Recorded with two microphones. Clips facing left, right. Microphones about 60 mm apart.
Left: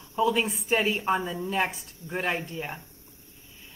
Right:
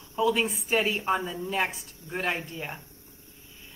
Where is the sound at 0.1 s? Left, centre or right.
Centre.